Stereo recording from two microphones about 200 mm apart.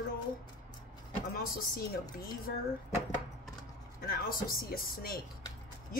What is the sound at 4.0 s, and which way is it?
Speech, 45° left (ahead or behind).